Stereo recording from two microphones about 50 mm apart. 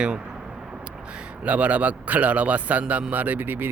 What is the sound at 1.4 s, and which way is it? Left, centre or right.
A man's voice, right.